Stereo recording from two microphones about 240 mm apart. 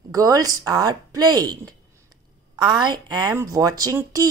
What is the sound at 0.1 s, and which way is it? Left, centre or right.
Speech, centre.